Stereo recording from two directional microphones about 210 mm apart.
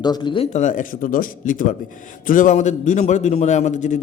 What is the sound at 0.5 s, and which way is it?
A man's voice, 40° left (ahead or behind).